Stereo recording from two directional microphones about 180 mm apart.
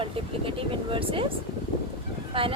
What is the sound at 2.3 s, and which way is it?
Speech, 30° right (ahead or behind).